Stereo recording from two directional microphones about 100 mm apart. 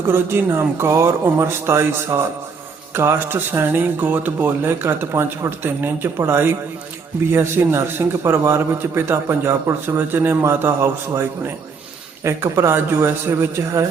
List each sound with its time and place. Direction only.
0.1 s a man's voice: 25° right (ahead or behind)